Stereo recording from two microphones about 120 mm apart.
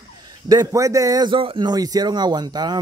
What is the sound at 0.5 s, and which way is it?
Speech, 30° right (ahead or behind).